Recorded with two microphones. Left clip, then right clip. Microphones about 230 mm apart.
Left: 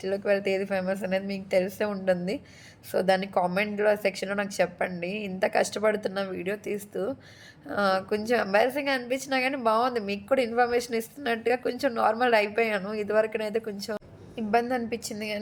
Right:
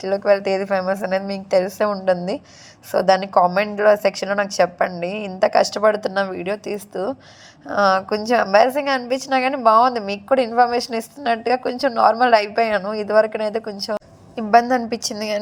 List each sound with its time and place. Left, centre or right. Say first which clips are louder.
0.0 s a woman's voice: right 9 dB; centre
14.3 s a woman's voice: right 11 dB; centre